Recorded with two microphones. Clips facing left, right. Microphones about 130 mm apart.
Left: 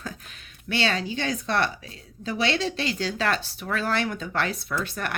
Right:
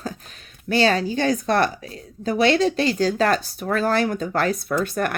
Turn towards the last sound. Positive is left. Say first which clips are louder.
# right 7 dB
turn(degrees=-45)  # may be behind; listen again after turning